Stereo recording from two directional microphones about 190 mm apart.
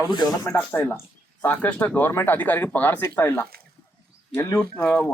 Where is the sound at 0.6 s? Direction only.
10° left (ahead or behind).